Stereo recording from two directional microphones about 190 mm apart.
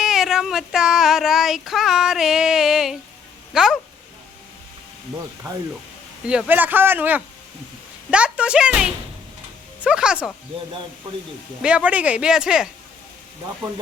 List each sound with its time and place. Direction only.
0.0 s child singing: centre (ahead or behind)
3.5 s speech: 5° right (ahead or behind)
6.2 s speech: 5° right (ahead or behind)
8.1 s child singing: 5° right (ahead or behind)
11.6 s child singing: 5° right (ahead or behind)